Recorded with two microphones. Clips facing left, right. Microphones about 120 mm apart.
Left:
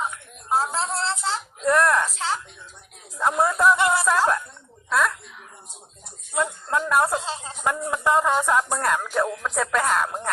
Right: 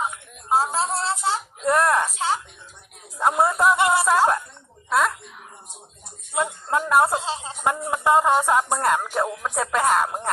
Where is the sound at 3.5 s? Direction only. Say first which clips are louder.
Even; 15° right (ahead or behind).